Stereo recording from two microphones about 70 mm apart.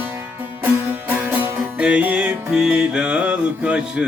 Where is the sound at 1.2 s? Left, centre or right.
Right.